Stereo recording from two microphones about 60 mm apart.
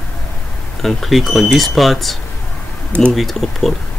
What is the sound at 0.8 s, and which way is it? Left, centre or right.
Speech, centre.